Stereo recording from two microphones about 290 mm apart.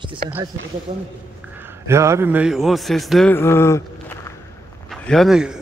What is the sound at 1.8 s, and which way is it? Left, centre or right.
A man's voice, centre.